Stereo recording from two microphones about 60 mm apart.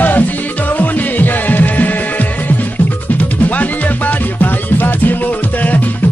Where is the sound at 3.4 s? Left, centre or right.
Left.